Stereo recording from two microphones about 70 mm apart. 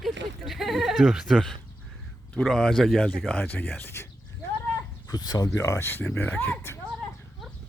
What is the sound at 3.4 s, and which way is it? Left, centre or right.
Speech, left.